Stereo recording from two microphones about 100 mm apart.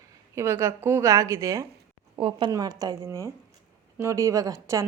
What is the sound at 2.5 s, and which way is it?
Speech, 40° right (ahead or behind).